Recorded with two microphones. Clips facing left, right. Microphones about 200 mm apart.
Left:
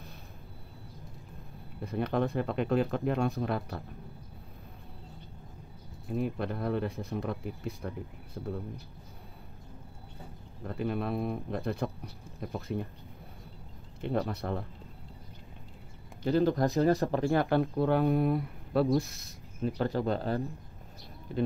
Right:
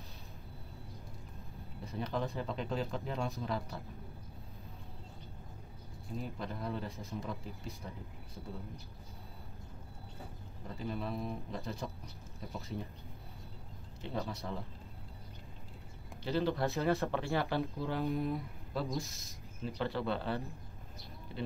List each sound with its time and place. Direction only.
1.8 s speech: 60° left (ahead or behind)
6.1 s speech: 60° left (ahead or behind)
10.7 s speech: 60° left (ahead or behind)
14.0 s speech: 60° left (ahead or behind)
16.3 s speech: 45° left (ahead or behind)
16.7 s speech: 35° left (ahead or behind)
17.3 s speech: 55° left (ahead or behind)
19.6 s speech: 45° left (ahead or behind)